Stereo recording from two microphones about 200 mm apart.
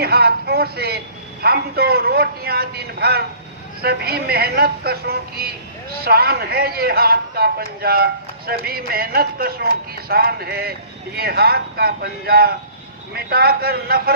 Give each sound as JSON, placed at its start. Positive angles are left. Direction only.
{"t": 0.0, "sound": "speech", "side_deg": -50}